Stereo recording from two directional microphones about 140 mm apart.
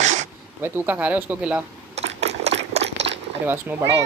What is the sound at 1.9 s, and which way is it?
Sewing machine, 50° right (ahead or behind).